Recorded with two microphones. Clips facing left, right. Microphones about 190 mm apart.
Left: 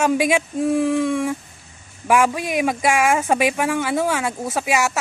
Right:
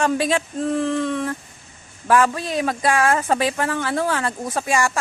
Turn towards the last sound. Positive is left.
turn(degrees=5)  # may be behind; listen again after turning